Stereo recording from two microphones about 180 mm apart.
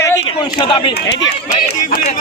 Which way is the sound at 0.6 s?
30° left (ahead or behind).